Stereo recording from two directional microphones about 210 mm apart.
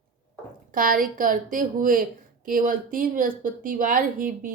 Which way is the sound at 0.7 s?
40° right (ahead or behind).